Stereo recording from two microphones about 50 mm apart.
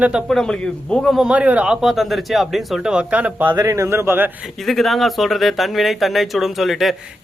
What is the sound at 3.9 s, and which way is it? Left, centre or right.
Speech, right.